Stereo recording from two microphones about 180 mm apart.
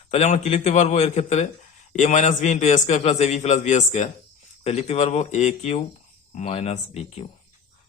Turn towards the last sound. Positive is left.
turn(degrees=35)  # may be behind; listen again after turning